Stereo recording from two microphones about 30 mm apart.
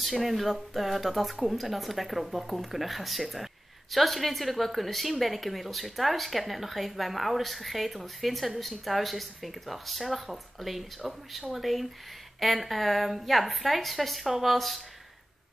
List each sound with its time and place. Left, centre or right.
0.0 s a woman's voice: centre